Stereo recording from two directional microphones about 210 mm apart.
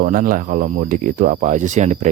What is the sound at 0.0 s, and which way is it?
Speech, 40° right (ahead or behind).